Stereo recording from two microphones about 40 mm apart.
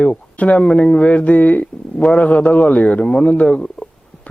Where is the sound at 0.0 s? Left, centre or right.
Left.